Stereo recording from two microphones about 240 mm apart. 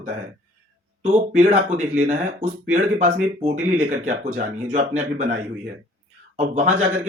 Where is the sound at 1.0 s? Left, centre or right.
Right.